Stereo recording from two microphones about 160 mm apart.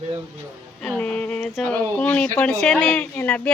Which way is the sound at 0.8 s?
5° left (ahead or behind).